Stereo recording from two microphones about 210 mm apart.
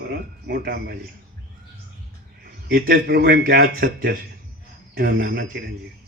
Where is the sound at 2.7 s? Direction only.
45° right (ahead or behind).